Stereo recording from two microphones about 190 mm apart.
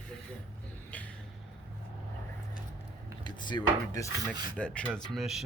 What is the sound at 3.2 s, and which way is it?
Speech, 25° left (ahead or behind).